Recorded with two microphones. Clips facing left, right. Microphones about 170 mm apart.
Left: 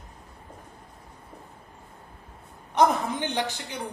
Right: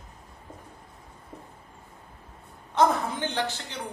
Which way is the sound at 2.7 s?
15° left (ahead or behind).